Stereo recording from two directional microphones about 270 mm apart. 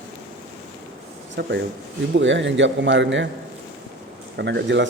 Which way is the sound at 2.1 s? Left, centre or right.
Right.